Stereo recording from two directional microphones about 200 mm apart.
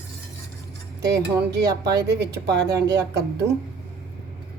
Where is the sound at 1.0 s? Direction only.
55° right (ahead or behind).